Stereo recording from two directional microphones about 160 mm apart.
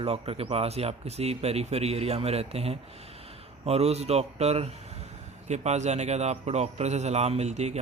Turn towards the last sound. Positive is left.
turn(degrees=-45)  # may be behind; listen again after turning